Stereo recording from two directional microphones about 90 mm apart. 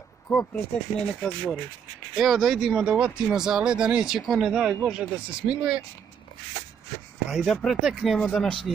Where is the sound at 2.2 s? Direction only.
Centre (ahead or behind).